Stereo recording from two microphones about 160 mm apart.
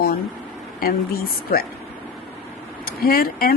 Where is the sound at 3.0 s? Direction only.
70° left (ahead or behind).